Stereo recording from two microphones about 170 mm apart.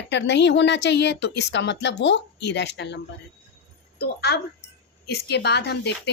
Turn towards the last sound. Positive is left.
turn(degrees=85)